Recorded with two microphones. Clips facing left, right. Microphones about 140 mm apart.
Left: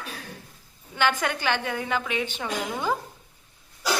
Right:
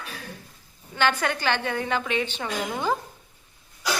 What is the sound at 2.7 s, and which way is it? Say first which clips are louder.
Speech: right 2 dB; 15° right (ahead or behind).